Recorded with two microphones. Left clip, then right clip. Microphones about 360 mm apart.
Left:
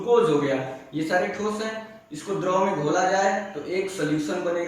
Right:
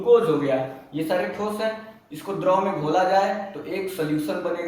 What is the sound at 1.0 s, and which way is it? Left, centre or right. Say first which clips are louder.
A man's voice: left 1 dB; centre.